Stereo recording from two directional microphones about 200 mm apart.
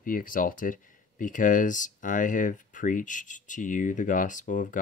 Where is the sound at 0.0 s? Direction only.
45° left (ahead or behind).